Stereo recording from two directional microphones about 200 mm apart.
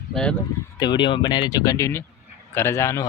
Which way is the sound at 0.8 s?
25° left (ahead or behind).